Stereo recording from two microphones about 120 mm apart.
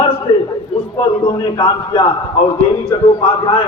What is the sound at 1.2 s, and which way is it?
Speech, 45° left (ahead or behind).